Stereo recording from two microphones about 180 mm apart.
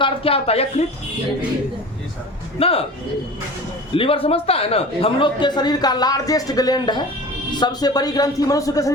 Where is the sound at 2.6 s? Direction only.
30° left (ahead or behind).